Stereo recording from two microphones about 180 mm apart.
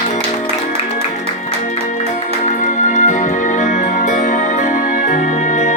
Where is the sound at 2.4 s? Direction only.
45° left (ahead or behind).